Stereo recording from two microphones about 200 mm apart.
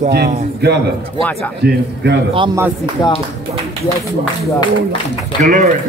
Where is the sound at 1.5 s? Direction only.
55° right (ahead or behind).